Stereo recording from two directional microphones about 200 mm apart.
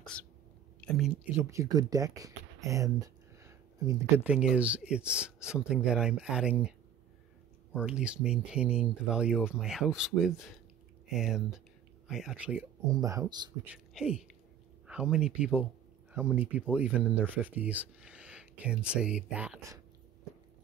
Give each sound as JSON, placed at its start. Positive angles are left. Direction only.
{"t": 0.0, "sound": "a woman's voice", "side_deg": 5}
{"t": 7.7, "sound": "speech", "side_deg": -5}
{"t": 12.9, "sound": "speech", "side_deg": -15}
{"t": 13.9, "sound": "speech", "side_deg": -5}